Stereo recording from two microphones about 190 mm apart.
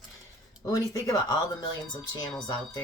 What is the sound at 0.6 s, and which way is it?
Speech, 15° left (ahead or behind).